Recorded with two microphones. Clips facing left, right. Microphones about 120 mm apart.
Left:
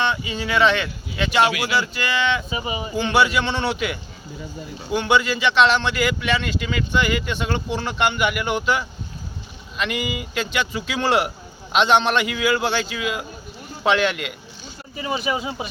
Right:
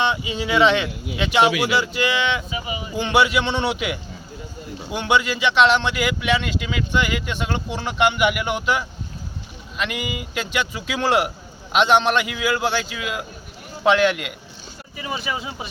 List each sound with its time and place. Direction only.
0.0 s speech: 15° right (ahead or behind)
2.5 s speech: 30° left (ahead or behind)
3.0 s speech: 15° right (ahead or behind)
14.9 s speech: 25° left (ahead or behind)